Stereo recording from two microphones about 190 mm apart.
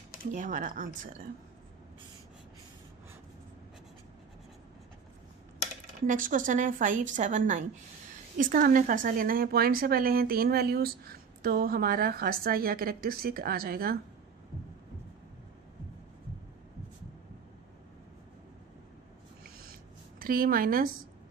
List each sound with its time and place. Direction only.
0.3 s a woman's voice: 40° right (ahead or behind)
6.1 s a woman's voice: 45° right (ahead or behind)
20.1 s speech: 50° right (ahead or behind)